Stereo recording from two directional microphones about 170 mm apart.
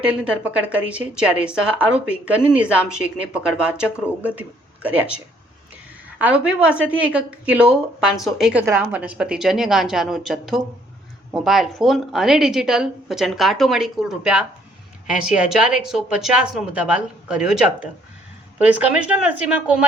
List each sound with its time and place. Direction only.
0.0 s a woman's voice: 5° right (ahead or behind)